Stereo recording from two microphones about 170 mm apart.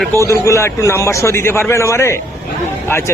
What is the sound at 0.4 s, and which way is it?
A man's voice, 15° left (ahead or behind).